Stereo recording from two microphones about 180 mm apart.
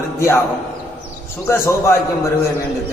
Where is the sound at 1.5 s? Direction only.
15° left (ahead or behind).